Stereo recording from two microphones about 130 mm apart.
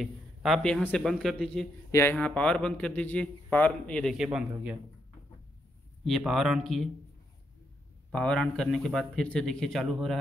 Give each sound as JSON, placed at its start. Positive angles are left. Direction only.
{"t": 0.0, "sound": "a man's voice", "side_deg": 0}
{"t": 1.9, "sound": "speech", "side_deg": 20}
{"t": 2.1, "sound": "a man's voice", "side_deg": 10}
{"t": 4.2, "sound": "speech", "side_deg": -5}
{"t": 6.0, "sound": "a man's voice", "side_deg": 0}
{"t": 8.1, "sound": "a man's voice", "side_deg": 5}